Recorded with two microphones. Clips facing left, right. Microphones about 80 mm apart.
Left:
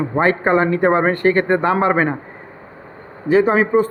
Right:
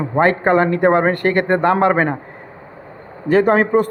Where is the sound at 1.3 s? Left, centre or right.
Left.